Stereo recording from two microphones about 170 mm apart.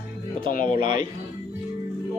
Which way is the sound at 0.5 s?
50° left (ahead or behind).